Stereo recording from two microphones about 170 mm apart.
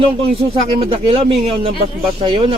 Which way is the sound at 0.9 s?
35° right (ahead or behind).